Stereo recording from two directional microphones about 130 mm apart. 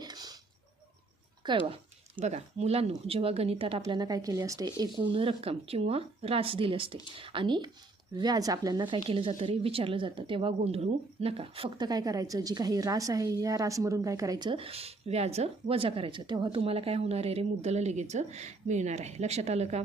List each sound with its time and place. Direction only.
0.0 s a sound: 30° right (ahead or behind)
1.6 s a woman's voice: 45° right (ahead or behind)
3.8 s speech: 30° right (ahead or behind)
9.0 s a woman's voice: 45° right (ahead or behind)
11.9 s a woman's voice: 30° right (ahead or behind); by 19.8 s 55° right (ahead or behind)